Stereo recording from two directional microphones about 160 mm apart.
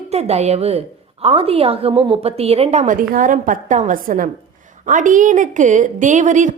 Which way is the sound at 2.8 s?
55° right (ahead or behind).